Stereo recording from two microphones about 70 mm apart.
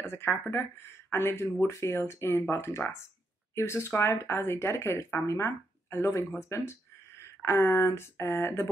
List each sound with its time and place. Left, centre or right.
0.0 s speech: left